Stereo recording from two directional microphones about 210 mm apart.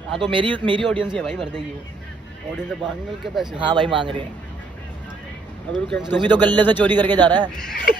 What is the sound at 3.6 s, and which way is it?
Speech, 20° right (ahead or behind).